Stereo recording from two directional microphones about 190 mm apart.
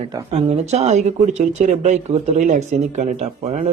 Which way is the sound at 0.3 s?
35° right (ahead or behind).